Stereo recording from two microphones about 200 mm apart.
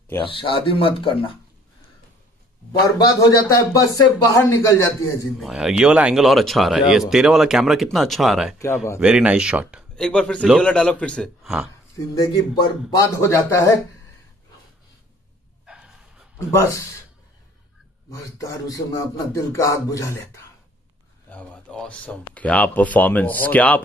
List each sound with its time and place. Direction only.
0.2 s speech: 25° left (ahead or behind)
2.8 s speech: 20° left (ahead or behind)
5.4 s speech: centre (ahead or behind)
8.5 s speech: 15° left (ahead or behind)
9.0 s speech: 5° right (ahead or behind)
12.2 s speech: 20° left (ahead or behind)
15.6 s a sound: 5° right (ahead or behind)
16.5 s speech: 15° left (ahead or behind)
18.1 s speech: 15° left (ahead or behind)